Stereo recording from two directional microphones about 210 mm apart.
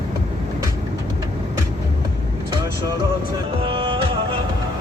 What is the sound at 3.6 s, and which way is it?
Music, 25° right (ahead or behind).